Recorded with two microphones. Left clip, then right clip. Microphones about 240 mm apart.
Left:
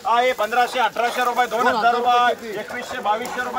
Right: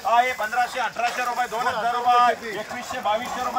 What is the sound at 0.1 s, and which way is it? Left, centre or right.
Speech, left.